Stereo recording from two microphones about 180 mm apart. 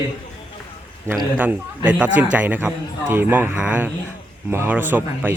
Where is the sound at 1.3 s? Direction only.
10° right (ahead or behind).